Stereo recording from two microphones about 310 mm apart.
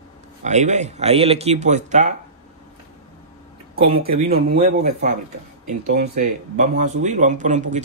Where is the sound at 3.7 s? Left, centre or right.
Centre.